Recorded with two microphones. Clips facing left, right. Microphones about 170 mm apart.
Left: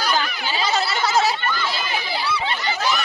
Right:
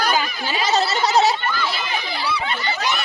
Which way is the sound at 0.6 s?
40° right (ahead or behind).